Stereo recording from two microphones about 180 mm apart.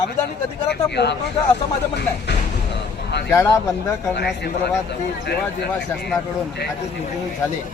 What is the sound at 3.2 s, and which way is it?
Speech, 15° left (ahead or behind).